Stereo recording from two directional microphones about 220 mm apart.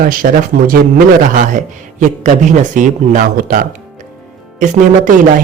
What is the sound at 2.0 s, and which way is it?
Speech, 35° right (ahead or behind).